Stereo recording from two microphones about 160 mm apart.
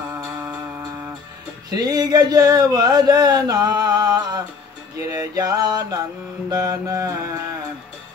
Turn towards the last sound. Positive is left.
turn(degrees=-20)  # may be behind; listen again after turning